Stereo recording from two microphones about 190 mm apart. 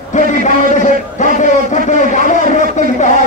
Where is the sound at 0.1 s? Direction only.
40° left (ahead or behind).